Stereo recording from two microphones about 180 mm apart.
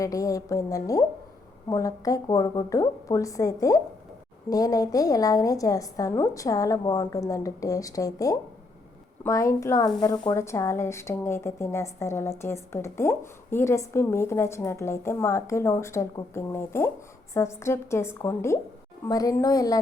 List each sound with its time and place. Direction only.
0.0 s a woman's voice: 20° left (ahead or behind)